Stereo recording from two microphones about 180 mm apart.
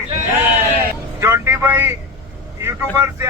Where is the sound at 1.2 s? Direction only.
10° right (ahead or behind).